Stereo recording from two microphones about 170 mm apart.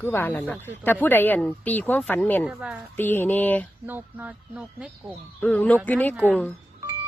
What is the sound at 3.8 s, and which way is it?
Speech, 10° right (ahead or behind).